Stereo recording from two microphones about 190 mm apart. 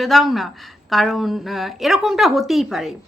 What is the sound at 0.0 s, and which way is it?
A woman's voice, centre (ahead or behind).